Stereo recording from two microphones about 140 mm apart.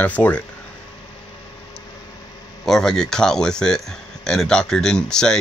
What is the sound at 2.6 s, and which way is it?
Speech, 5° left (ahead or behind).